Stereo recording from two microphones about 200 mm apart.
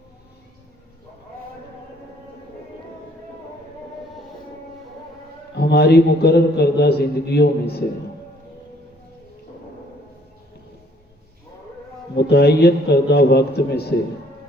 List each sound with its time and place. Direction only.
5.5 s a man's voice: 55° left (ahead or behind)
12.1 s a man's voice: 55° left (ahead or behind)